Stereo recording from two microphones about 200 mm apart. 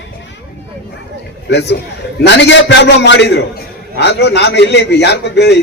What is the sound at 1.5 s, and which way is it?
A man's voice, 60° left (ahead or behind).